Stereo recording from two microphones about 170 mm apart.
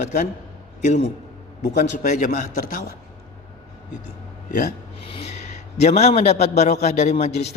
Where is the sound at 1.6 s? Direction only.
45° left (ahead or behind).